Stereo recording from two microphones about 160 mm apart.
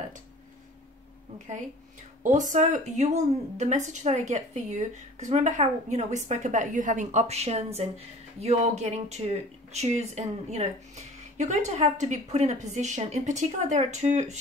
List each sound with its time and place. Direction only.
2.5 s a woman's voice: 50° right (ahead or behind)